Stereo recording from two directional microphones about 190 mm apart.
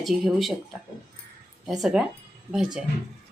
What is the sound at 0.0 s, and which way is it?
Speech, centre (ahead or behind).